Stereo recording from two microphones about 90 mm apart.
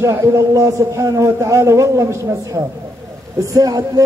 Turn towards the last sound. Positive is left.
turn(degrees=-40)  # may be behind; listen again after turning